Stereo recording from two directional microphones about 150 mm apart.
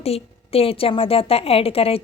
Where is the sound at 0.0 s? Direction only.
40° left (ahead or behind).